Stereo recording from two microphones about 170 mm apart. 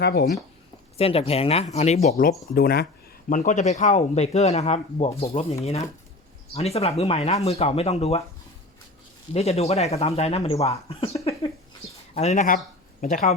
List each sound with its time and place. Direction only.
0.0 s speech: 70° left (ahead or behind)
0.9 s speech: 35° left (ahead or behind)
2.2 s speech: 60° left (ahead or behind)
3.2 s speech: 50° left (ahead or behind)
6.5 s speech: 35° left (ahead or behind)
9.3 s speech: 35° left (ahead or behind)